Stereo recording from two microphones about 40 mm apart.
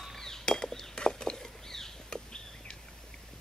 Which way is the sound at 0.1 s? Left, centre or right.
Centre.